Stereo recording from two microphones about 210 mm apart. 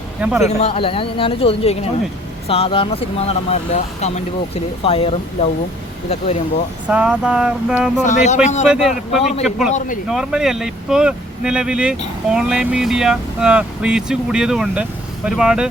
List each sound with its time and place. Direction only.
0.2 s speech: 5° right (ahead or behind)
0.4 s speech: 30° left (ahead or behind)
6.8 s speech: 5° right (ahead or behind)
8.0 s speech: 35° left (ahead or behind)
8.6 s speech: 5° right (ahead or behind)